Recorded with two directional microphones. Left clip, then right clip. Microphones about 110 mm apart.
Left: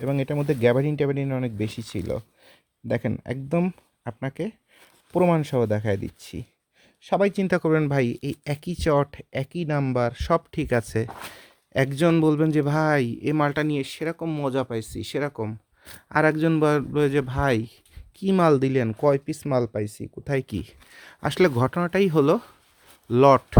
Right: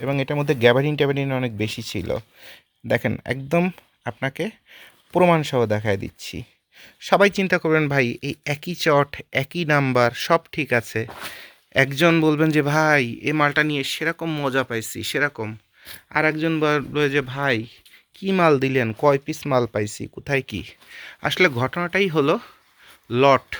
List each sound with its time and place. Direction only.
0.0 s speech: 20° left (ahead or behind)
6.7 s speech: centre (ahead or behind)
7.4 s speech: 35° left (ahead or behind)
7.8 s speech: 20° left (ahead or behind)
10.5 s speech: 35° left (ahead or behind)
11.3 s speech: 25° left (ahead or behind)
16.0 s speech: 70° left (ahead or behind)
18.2 s speech: 35° left (ahead or behind); by 19.7 s 15° left (ahead or behind)
19.7 s speech: 5° left (ahead or behind)
20.2 s speech: 30° left (ahead or behind); by 23.6 s 50° left (ahead or behind)